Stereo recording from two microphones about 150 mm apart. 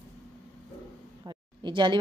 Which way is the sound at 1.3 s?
30° right (ahead or behind).